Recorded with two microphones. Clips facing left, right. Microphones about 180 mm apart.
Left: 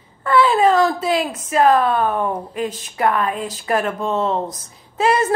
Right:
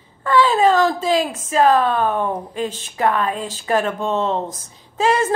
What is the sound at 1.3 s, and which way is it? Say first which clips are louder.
A woman's voice: left 3 dB; 25° right (ahead or behind).